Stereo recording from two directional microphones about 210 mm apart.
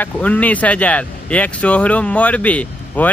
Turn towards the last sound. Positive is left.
turn(degrees=5)  # may be behind; listen again after turning